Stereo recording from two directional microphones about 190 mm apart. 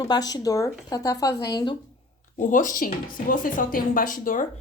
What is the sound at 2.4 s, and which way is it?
Speech, 45° left (ahead or behind).